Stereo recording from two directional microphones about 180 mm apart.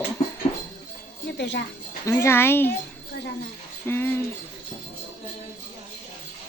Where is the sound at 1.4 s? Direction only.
70° left (ahead or behind).